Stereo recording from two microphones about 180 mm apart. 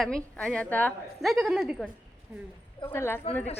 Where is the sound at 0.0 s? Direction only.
5° left (ahead or behind).